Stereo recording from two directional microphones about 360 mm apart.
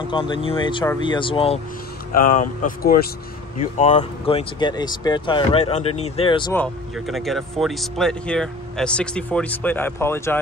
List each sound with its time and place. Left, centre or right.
0.1 s speech: centre